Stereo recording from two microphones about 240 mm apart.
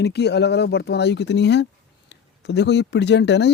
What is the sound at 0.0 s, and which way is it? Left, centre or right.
Speech, left.